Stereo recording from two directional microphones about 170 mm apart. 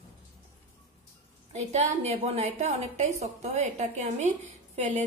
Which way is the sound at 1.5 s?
40° right (ahead or behind).